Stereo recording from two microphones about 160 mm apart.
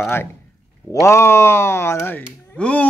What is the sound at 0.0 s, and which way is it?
A man's voice, 15° left (ahead or behind).